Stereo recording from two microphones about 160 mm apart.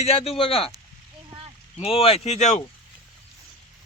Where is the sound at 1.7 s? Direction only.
35° left (ahead or behind).